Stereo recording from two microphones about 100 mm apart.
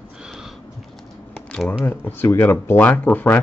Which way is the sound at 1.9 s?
20° left (ahead or behind).